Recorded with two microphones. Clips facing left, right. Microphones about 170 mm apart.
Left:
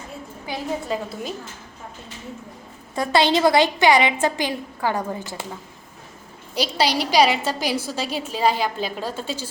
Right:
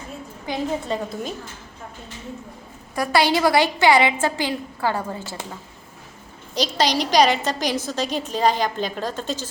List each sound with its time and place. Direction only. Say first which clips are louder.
0.4 s a woman's voice: right 2 dB; 5° left (ahead or behind)
2.9 s a woman's voice: left 1 dB; 25° left (ahead or behind)
6.5 s a woman's voice: even; 10° left (ahead or behind)